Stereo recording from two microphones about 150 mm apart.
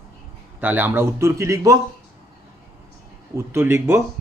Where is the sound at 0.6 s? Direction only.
10° right (ahead or behind).